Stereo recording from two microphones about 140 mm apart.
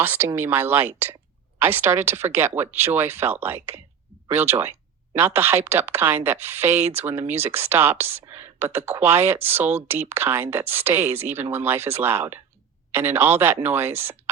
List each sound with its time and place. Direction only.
0.0 s speech: 15° right (ahead or behind)